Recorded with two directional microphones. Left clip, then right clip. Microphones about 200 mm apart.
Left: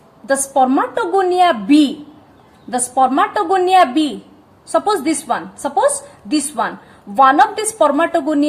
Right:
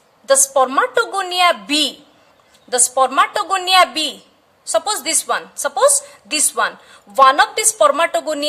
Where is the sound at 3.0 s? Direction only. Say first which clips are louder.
Left 2 dB; 40° right (ahead or behind).